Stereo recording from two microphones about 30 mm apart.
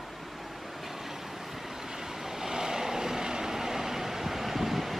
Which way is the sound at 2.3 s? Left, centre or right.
Centre.